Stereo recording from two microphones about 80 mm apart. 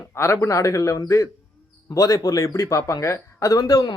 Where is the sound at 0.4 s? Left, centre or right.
Left.